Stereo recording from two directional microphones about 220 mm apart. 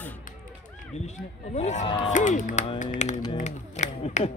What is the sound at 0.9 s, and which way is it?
Speech, 30° left (ahead or behind).